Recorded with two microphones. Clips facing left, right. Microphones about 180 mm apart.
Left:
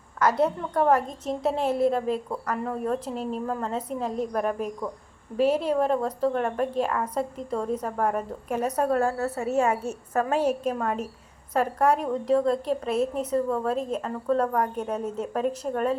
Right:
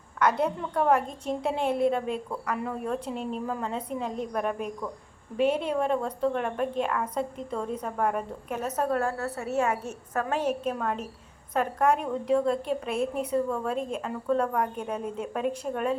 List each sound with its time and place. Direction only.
0.2 s a woman's voice: 5° left (ahead or behind)
9.3 s a woman's voice: 40° left (ahead or behind)
10.4 s a woman's voice: 10° left (ahead or behind)